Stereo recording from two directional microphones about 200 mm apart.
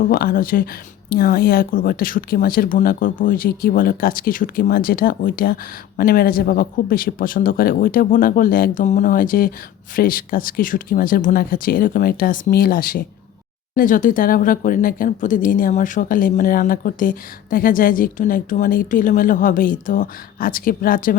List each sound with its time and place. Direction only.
0.0 s speech: 50° left (ahead or behind)